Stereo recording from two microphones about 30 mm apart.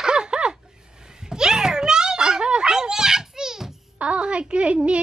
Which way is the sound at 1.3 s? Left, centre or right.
Right.